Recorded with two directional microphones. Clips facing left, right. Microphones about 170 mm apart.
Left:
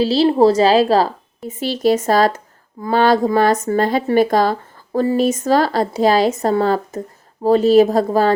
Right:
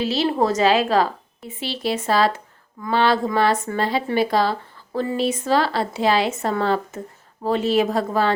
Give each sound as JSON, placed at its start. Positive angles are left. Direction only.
{"t": 0.0, "sound": "a woman's voice", "side_deg": 30}